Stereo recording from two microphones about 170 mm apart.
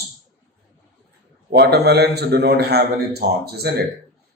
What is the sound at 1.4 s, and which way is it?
Speech, 75° right (ahead or behind).